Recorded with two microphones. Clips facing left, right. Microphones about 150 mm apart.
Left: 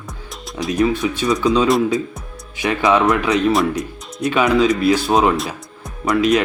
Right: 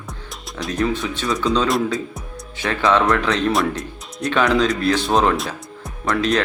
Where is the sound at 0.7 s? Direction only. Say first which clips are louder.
Left 4 dB; 15° left (ahead or behind).